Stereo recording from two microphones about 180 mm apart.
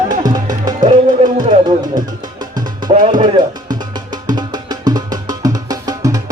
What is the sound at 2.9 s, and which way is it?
Music, 25° right (ahead or behind).